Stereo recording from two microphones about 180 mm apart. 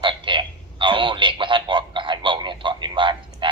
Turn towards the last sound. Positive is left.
turn(degrees=-25)  # may be behind; listen again after turning